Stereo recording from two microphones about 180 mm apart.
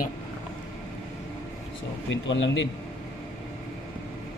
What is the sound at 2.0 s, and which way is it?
Speech, 90° left.